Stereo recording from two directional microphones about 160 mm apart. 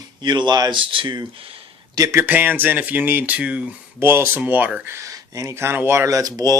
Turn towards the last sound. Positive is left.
turn(degrees=-25)  # may be behind; listen again after turning